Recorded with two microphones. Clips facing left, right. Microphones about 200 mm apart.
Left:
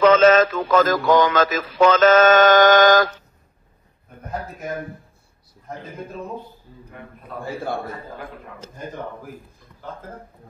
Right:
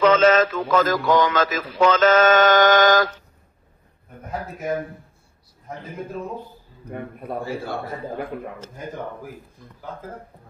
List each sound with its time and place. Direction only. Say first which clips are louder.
0.0 s speech: left 2 dB; 45° left (ahead or behind)